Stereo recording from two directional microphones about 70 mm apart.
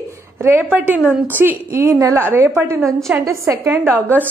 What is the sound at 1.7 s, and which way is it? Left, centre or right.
A woman's voice, right.